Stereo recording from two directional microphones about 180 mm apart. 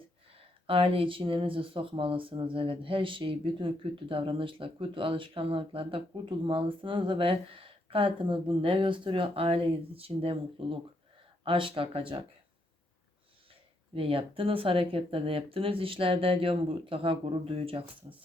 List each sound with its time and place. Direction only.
0.3 s speech: 30° right (ahead or behind)
13.5 s speech: 30° right (ahead or behind)